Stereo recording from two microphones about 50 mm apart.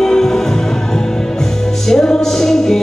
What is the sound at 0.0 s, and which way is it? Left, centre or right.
Music, centre.